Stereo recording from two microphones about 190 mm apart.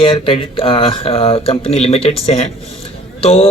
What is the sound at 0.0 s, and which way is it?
Speech, 25° left (ahead or behind).